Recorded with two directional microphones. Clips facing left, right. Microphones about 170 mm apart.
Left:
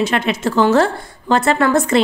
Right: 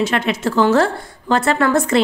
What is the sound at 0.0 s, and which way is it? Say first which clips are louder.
A woman's voice: left 1 dB; 20° left (ahead or behind).